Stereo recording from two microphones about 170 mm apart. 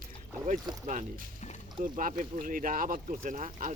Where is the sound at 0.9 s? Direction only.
50° right (ahead or behind).